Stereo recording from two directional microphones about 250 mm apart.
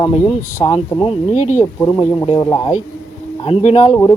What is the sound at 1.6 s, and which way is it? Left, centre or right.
Speech, centre.